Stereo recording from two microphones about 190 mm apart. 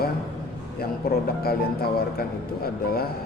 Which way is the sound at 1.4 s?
55° left (ahead or behind).